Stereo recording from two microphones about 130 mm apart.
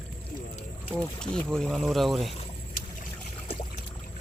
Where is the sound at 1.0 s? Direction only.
5° left (ahead or behind).